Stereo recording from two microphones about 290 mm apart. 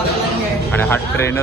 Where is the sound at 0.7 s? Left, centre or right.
Centre.